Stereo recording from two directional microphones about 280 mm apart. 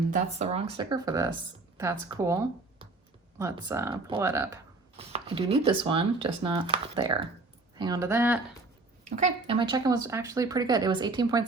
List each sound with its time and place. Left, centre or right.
0.1 s speech: right
4.9 s speech: right
9.0 s speech: right